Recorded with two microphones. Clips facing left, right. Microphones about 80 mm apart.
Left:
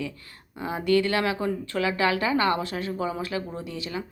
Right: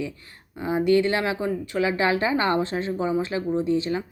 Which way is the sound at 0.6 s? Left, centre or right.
Right.